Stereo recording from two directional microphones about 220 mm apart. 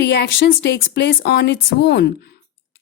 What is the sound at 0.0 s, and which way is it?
Speech, 50° left (ahead or behind).